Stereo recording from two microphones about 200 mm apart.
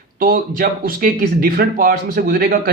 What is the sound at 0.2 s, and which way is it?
Speech, 45° right (ahead or behind).